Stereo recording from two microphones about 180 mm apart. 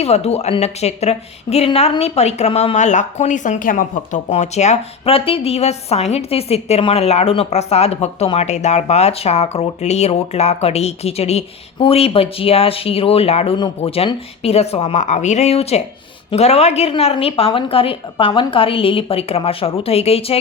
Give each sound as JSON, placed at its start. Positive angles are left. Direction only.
{"t": 0.0, "sound": "a woman's voice", "side_deg": 35}